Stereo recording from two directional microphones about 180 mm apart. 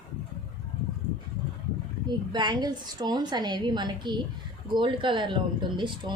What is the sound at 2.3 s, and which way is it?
A woman's voice, 25° right (ahead or behind).